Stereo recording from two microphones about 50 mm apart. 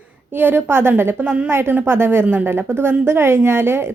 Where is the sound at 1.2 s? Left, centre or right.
Right.